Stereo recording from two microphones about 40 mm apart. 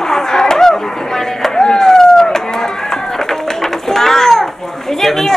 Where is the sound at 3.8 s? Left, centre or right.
Centre.